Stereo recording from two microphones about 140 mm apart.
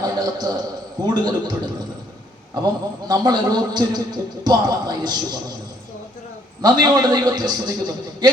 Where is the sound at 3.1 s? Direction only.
30° right (ahead or behind).